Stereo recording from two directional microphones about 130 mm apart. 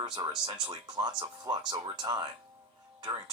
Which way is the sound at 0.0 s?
35° right (ahead or behind).